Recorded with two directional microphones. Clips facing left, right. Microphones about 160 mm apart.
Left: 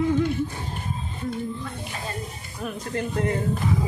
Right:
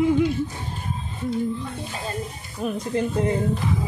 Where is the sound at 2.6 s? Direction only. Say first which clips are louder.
Right 5 dB; 20° right (ahead or behind).